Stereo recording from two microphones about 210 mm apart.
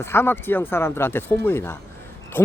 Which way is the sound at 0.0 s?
10° left (ahead or behind).